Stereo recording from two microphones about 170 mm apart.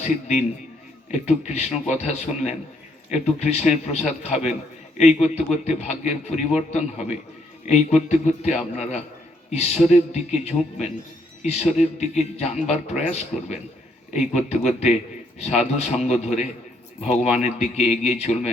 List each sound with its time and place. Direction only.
0.0 s a man's voice: 40° left (ahead or behind)